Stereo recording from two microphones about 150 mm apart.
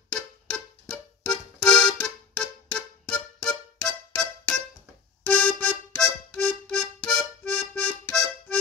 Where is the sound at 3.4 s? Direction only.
5° left (ahead or behind).